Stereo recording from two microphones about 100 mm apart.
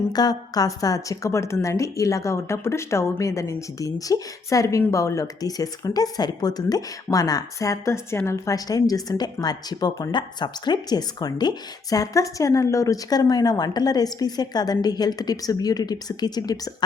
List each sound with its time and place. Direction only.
0.1 s a woman's voice: 40° left (ahead or behind)